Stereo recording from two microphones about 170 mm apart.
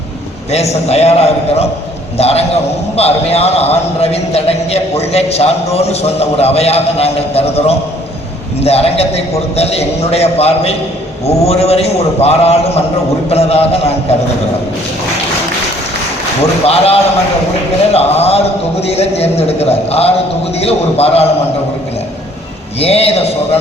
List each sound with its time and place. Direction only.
0.5 s a man's voice: 40° left (ahead or behind)
16.4 s a man's voice: 35° left (ahead or behind)
22.8 s a man's voice: 35° left (ahead or behind)